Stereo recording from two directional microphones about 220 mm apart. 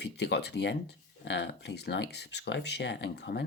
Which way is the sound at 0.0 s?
50° left (ahead or behind).